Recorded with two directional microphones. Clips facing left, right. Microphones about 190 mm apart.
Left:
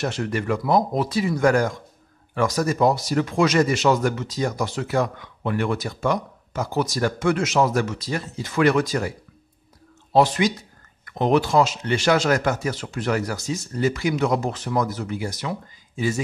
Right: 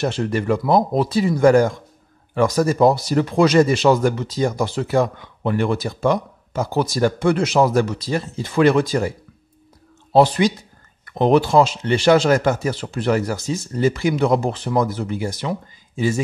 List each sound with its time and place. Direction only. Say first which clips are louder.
0.0 s speech: right 4 dB; 30° right (ahead or behind)
10.1 s speech: right 4 dB; 35° right (ahead or behind)